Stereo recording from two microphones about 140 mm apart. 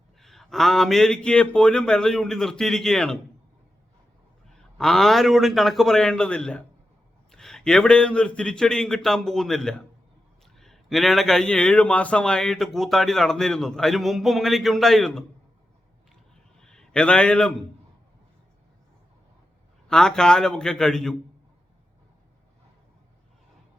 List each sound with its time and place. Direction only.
0.2 s speech: centre (ahead or behind)
4.4 s speech: 5° left (ahead or behind)
16.3 s a sound: 5° left (ahead or behind)
19.9 s speech: 5° left (ahead or behind)